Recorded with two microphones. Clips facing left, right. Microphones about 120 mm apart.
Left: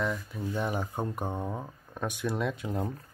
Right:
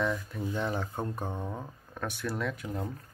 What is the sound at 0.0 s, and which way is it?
Speech, 5° left (ahead or behind).